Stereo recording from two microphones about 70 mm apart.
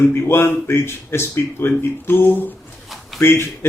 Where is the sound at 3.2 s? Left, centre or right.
Left.